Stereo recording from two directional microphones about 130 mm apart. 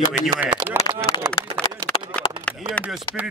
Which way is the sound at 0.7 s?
30° left (ahead or behind).